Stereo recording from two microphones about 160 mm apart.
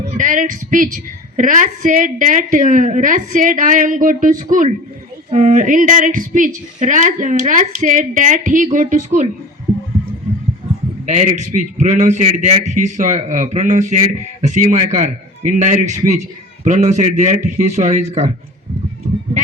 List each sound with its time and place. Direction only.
0.2 s a woman's voice: 55° right (ahead or behind)
11.0 s a woman's voice: 50° right (ahead or behind)